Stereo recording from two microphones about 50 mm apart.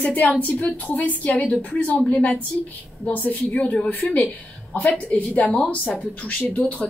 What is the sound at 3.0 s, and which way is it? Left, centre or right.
A woman's voice, left.